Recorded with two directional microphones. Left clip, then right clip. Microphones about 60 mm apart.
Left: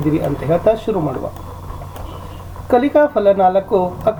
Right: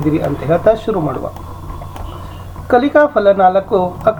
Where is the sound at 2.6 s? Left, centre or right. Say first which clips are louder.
Right 2 dB; left.